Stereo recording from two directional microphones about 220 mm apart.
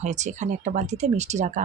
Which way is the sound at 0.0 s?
30° right (ahead or behind).